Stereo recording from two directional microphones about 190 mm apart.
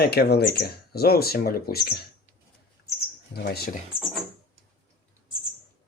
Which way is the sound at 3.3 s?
55° left (ahead or behind).